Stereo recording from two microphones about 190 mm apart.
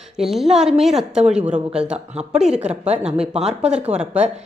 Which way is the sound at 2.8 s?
35° right (ahead or behind).